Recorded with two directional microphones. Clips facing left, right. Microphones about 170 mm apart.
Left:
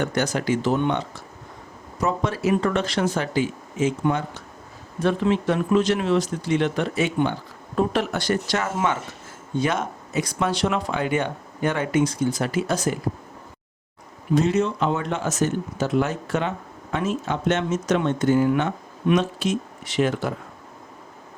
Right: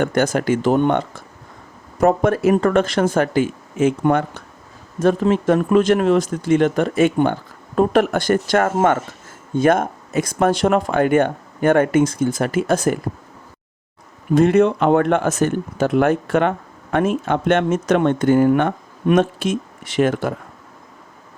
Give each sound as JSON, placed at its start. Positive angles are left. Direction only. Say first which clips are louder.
{"t": 0.0, "sound": "speech", "louder": "right 6 dB", "side_deg": -50}
{"t": 4.9, "sound": "speech", "louder": "right 5 dB", "side_deg": -45}
{"t": 14.3, "sound": "speech", "louder": "right 7 dB", "side_deg": -55}